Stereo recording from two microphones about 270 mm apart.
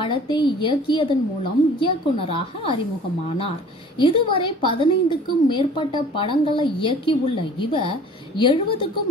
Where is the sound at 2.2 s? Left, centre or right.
Left.